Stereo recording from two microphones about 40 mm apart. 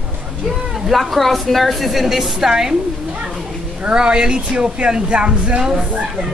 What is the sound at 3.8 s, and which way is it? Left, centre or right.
Speech, right.